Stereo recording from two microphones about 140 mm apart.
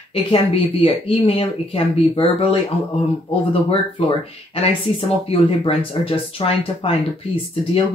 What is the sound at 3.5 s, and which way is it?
Speech, 40° left (ahead or behind).